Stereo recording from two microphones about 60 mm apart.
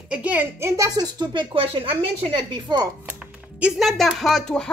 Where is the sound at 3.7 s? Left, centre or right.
Centre.